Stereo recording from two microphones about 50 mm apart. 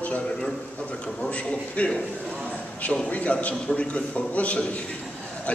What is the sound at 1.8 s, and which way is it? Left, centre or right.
A man's voice, left.